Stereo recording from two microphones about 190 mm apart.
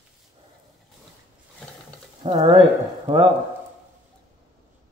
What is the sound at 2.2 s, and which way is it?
Speech, 25° right (ahead or behind).